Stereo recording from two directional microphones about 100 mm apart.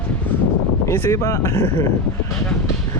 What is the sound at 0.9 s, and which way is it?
Speech, 25° left (ahead or behind).